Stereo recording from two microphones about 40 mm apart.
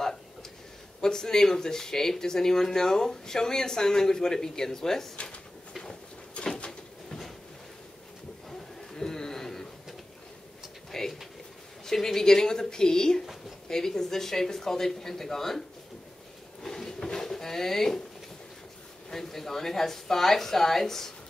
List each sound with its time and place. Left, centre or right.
0.0 s a sound: centre
1.0 s speech: centre
5.1 s drawer open or close: left
5.7 s a sound: centre
6.3 s cupboard open or close: left
7.1 s train: centre
8.5 s a sound: centre
10.9 s pigeon: centre
11.8 s speech: centre
16.6 s drawer open or close: centre
19.0 s speech: centre